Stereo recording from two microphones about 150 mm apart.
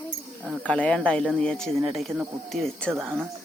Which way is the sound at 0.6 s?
10° left (ahead or behind).